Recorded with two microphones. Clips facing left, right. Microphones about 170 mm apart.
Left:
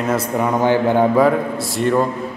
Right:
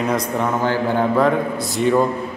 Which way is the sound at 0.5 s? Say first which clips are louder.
Left 6 dB; 15° left (ahead or behind).